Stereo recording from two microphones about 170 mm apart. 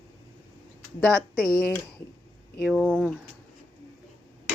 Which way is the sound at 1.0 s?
Centre (ahead or behind).